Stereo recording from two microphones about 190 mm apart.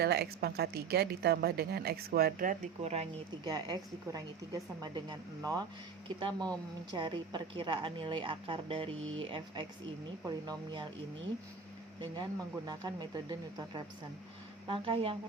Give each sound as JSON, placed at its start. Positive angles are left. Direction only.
{"t": 0.0, "sound": "a woman's voice", "side_deg": -55}
{"t": 3.4, "sound": "a woman's voice", "side_deg": -20}
{"t": 11.9, "sound": "a woman's voice", "side_deg": -20}